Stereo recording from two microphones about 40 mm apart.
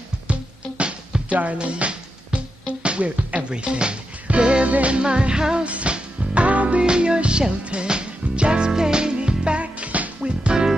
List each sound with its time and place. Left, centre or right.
0.3 s music: right
6.8 s music: right
10.2 s music: right